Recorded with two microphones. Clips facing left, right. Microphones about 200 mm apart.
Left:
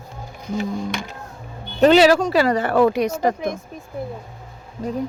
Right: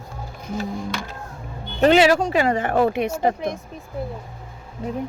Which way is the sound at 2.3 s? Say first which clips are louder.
Left 2 dB; 35° left (ahead or behind).